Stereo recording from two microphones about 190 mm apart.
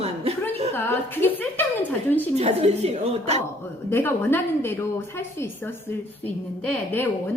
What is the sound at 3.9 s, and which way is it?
A woman's voice, 10° left (ahead or behind).